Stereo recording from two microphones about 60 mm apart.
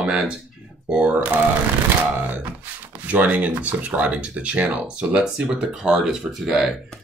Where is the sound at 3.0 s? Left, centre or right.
Right.